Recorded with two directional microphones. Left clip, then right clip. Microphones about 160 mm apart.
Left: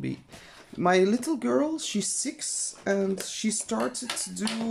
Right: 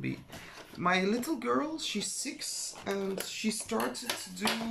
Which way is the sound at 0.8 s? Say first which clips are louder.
Left 6 dB; 35° left (ahead or behind).